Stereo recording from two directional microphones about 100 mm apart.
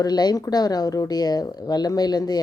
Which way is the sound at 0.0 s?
45° left (ahead or behind).